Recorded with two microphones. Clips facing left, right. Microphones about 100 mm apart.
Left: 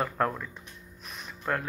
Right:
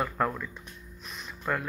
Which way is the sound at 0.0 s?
5° left (ahead or behind).